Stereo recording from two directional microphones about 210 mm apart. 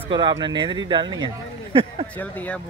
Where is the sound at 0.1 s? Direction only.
20° right (ahead or behind).